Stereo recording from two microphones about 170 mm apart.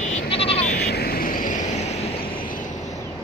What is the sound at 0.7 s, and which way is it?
Vehicle, 70° left (ahead or behind).